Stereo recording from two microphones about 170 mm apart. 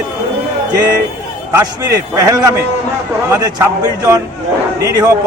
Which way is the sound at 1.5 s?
20° right (ahead or behind).